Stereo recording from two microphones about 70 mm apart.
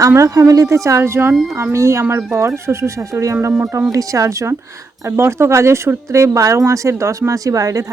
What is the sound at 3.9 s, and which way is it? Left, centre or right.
Speech, right.